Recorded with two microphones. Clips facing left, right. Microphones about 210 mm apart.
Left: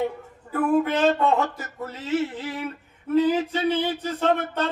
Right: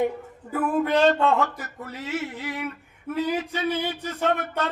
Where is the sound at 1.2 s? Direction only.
20° left (ahead or behind).